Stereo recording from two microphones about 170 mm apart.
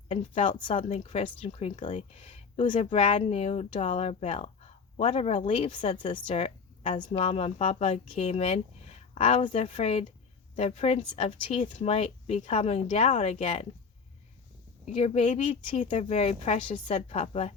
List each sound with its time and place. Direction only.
0.1 s speech: 30° left (ahead or behind)
14.8 s speech: 40° left (ahead or behind)